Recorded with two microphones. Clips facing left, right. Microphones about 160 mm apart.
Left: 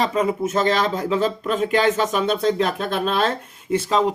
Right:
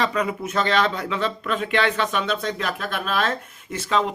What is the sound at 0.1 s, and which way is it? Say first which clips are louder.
Speech: left 4 dB; 30° left (ahead or behind).